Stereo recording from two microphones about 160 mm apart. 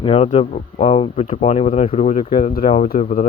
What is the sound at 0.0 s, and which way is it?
Speech, 40° left (ahead or behind).